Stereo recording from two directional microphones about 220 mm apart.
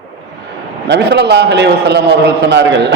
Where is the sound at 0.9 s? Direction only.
50° right (ahead or behind).